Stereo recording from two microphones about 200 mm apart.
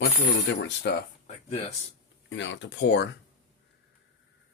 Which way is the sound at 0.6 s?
60° left (ahead or behind).